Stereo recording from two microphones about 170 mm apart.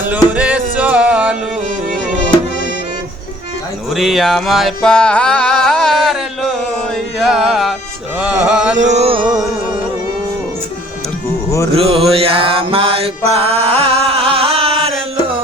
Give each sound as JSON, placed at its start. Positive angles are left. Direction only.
{"t": 0.3, "sound": "music", "side_deg": -10}
{"t": 3.9, "sound": "music", "side_deg": 0}
{"t": 8.7, "sound": "mantra", "side_deg": -45}
{"t": 11.7, "sound": "mantra", "side_deg": -35}
{"t": 13.7, "sound": "music", "side_deg": -35}